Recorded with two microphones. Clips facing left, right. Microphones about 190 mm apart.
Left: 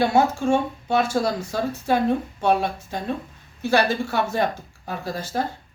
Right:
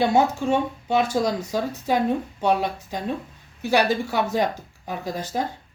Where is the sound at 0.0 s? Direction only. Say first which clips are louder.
Even; 15° right (ahead or behind).